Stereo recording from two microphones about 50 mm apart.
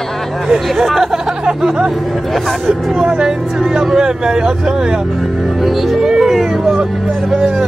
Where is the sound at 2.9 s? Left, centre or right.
Centre.